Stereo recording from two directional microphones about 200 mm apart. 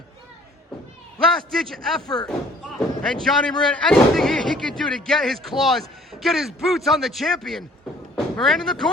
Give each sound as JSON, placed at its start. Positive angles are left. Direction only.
{"t": 1.5, "sound": "speech", "side_deg": 0}
{"t": 2.0, "sound": "speech", "side_deg": 20}
{"t": 2.7, "sound": "speech", "side_deg": 0}